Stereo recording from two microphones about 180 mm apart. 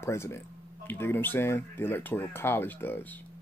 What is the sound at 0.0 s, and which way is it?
Speech, 15° left (ahead or behind).